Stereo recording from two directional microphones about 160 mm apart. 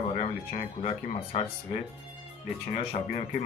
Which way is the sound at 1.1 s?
40° left (ahead or behind).